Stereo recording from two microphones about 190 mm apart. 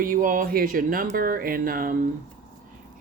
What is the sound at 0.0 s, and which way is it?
Speech, 45° right (ahead or behind).